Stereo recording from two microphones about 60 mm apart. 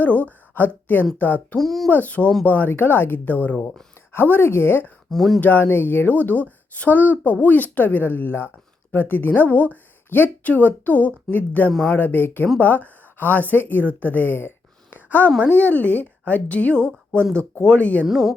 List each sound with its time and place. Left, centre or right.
0.0 s speech: left
1.5 s speech: centre
1.9 s a woman's voice: left
5.1 s speech: centre
5.4 s a woman's voice: left
18.0 s speech: centre